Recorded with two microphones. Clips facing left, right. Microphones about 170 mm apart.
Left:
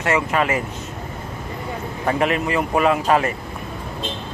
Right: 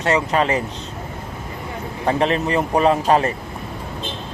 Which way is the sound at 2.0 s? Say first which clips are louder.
Right 1 dB; 30° right (ahead or behind).